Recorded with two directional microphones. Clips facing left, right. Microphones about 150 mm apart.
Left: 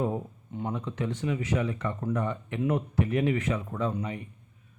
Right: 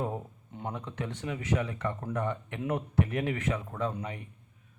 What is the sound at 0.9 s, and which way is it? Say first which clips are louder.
Speech: left 5 dB; 55° right (ahead or behind).